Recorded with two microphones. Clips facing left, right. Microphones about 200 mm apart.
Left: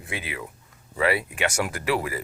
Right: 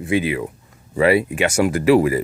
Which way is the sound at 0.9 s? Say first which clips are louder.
Right 9 dB; 20° right (ahead or behind).